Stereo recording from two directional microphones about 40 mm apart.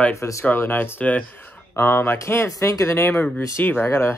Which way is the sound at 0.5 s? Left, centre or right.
Left.